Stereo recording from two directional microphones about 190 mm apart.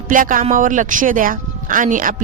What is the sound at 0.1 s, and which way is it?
Speech, 45° right (ahead or behind).